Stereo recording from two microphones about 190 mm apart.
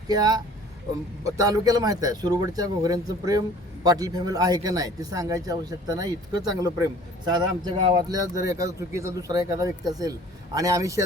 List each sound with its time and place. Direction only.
0.1 s speech: 20° right (ahead or behind)